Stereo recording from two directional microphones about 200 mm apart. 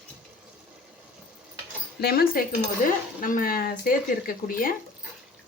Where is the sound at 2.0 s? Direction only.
50° left (ahead or behind).